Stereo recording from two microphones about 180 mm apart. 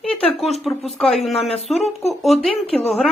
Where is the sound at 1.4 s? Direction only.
35° left (ahead or behind).